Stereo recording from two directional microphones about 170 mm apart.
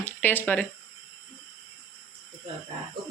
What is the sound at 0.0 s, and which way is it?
Speech, 10° left (ahead or behind).